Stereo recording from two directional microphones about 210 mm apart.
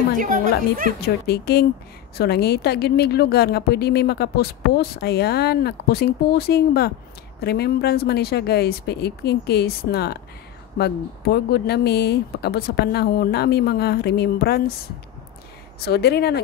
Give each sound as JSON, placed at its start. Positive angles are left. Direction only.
{"t": 0.2, "sound": "speech", "side_deg": -40}
{"t": 1.0, "sound": "speech", "side_deg": 50}
{"t": 15.8, "sound": "speech", "side_deg": 50}